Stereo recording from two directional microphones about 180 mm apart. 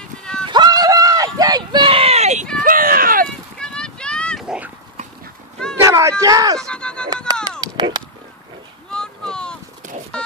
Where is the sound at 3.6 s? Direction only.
5° left (ahead or behind).